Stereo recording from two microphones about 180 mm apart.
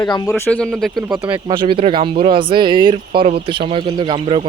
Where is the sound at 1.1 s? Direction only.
25° right (ahead or behind).